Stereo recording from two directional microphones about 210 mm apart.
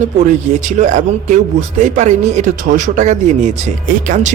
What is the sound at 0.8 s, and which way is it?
Speech, 35° right (ahead or behind).